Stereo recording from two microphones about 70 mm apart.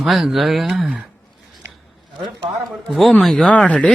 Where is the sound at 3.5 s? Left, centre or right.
Centre.